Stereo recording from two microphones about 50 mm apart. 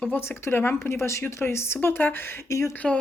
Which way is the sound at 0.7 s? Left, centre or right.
Left.